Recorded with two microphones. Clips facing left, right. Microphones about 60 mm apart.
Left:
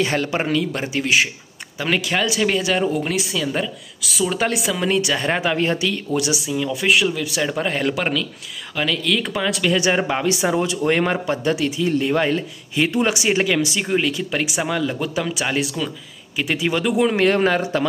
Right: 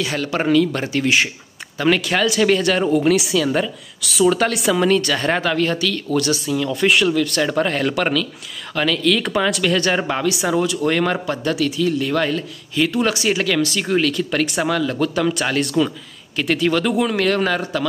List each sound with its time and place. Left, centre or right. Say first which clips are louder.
0.0 s speech: left 2 dB; left
0.4 s speech: right 5 dB; centre
1.0 s speech: left 1 dB; centre
4.8 s speech: left 1 dB; centre
10.2 s speech: right 1 dB; left